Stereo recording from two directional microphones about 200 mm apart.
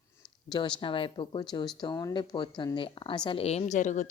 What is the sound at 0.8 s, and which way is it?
Speech, 25° left (ahead or behind).